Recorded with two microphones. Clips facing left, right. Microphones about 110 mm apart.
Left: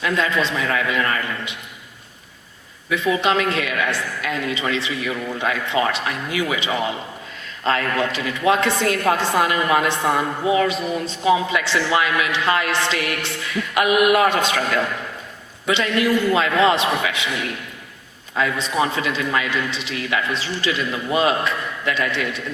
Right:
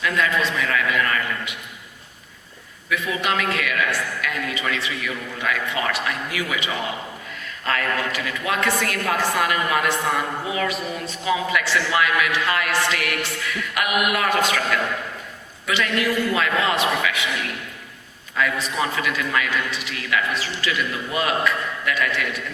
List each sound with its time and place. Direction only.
0.0 s a man's voice: 25° left (ahead or behind)
2.9 s a man's voice: 25° left (ahead or behind)
18.3 s a man's voice: 25° left (ahead or behind)